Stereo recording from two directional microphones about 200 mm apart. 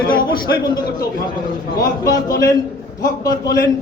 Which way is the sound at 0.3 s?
20° left (ahead or behind).